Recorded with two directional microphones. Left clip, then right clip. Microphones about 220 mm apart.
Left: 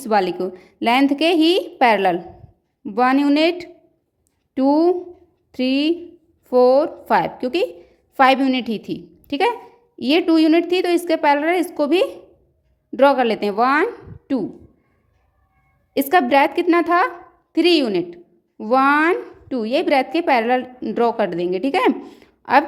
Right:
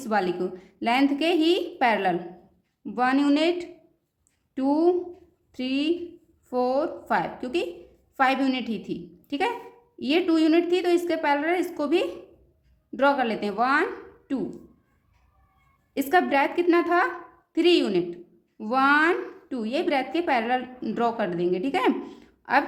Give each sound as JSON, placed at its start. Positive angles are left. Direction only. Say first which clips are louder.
{"t": 0.0, "sound": "a woman's voice", "louder": "left 7 dB", "side_deg": 35}
{"t": 15.9, "sound": "a woman's voice", "louder": "left 6 dB", "side_deg": 35}